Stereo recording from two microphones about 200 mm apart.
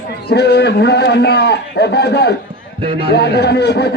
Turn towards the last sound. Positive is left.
turn(degrees=55)  # may be behind; listen again after turning